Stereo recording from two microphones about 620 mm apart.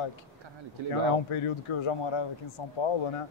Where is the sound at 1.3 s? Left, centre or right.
Left.